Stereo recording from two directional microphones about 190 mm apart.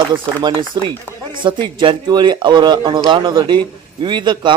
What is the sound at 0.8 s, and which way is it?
Speech, 25° right (ahead or behind).